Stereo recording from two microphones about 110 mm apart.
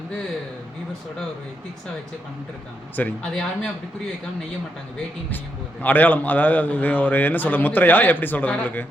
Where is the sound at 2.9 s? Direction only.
15° left (ahead or behind).